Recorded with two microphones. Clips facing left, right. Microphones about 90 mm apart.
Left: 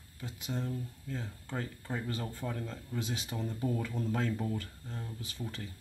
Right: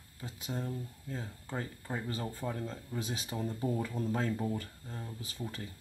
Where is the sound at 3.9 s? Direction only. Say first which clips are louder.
Even; 30° right (ahead or behind).